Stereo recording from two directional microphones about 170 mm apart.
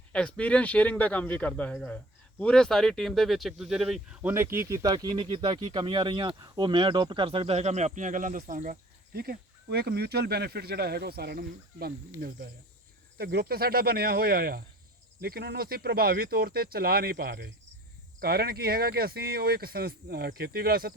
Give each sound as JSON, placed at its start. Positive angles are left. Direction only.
{"t": 0.1, "sound": "speech", "side_deg": 5}